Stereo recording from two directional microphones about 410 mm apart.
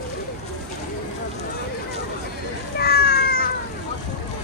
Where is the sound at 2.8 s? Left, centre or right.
Left.